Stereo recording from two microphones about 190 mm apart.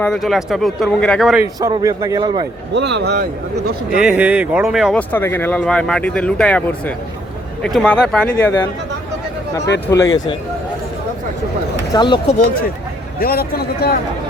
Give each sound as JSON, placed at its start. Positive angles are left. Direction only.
{"t": 0.0, "sound": "speech", "side_deg": 0}
{"t": 1.7, "sound": "speech", "side_deg": -20}
{"t": 2.7, "sound": "speech", "side_deg": -65}
{"t": 4.0, "sound": "speech", "side_deg": -5}
{"t": 5.1, "sound": "speech", "side_deg": 10}
{"t": 9.8, "sound": "speech", "side_deg": 15}
{"t": 11.9, "sound": "speech", "side_deg": 25}
{"t": 13.1, "sound": "speech", "side_deg": 50}